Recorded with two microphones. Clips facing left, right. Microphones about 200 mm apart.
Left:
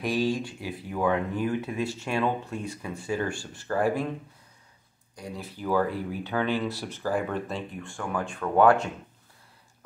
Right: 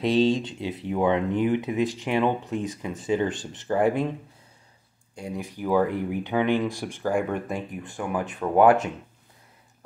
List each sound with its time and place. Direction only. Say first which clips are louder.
0.0 s speech: right 5 dB; 25° right (ahead or behind)
5.1 s speech: right 5 dB; 20° right (ahead or behind)